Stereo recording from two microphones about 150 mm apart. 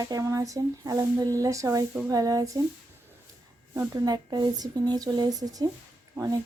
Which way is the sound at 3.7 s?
25° right (ahead or behind).